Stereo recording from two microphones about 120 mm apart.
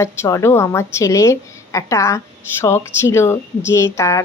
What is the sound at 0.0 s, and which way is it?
Speech, 25° left (ahead or behind).